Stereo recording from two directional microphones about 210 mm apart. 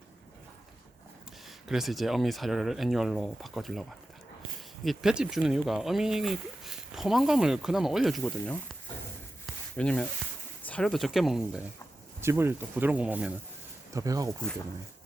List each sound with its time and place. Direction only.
1.6 s speech: centre (ahead or behind)
9.7 s speech: 5° left (ahead or behind); by 14.3 s 15° right (ahead or behind)